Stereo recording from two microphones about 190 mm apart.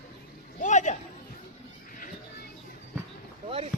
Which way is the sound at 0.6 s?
40° left (ahead or behind).